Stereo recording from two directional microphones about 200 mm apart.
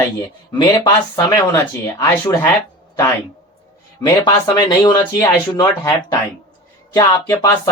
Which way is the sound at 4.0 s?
20° left (ahead or behind).